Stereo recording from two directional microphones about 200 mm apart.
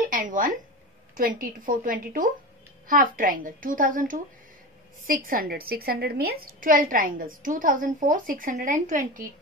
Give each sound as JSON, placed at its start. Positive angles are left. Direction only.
{"t": 0.1, "sound": "a woman's voice", "side_deg": -40}